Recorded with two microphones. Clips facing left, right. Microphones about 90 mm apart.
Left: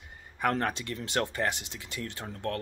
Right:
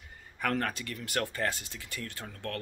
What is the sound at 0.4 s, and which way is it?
Speech, 25° left (ahead or behind).